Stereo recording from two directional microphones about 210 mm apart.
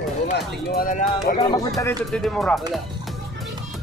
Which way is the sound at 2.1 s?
5° left (ahead or behind).